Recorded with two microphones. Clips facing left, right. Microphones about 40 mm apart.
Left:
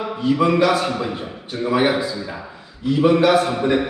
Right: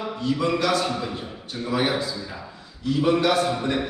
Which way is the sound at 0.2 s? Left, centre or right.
Left.